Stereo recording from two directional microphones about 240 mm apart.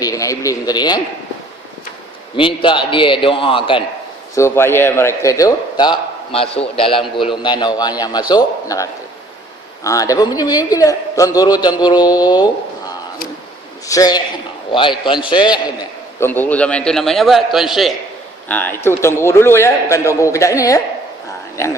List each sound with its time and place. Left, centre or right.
0.0 s speech: centre
2.3 s a man's voice: left
4.4 s a man's voice: centre